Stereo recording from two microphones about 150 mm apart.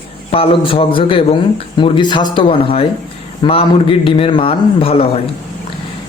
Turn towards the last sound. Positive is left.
turn(degrees=40)  # may be behind; listen again after turning